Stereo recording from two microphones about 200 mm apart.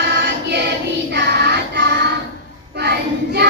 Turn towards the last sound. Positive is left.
turn(degrees=-55)  # may be behind; listen again after turning